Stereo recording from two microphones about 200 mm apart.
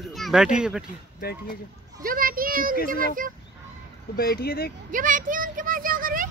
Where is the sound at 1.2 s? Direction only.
50° left (ahead or behind).